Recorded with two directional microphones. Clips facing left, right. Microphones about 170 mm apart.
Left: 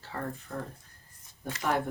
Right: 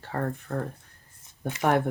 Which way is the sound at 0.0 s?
55° right (ahead or behind).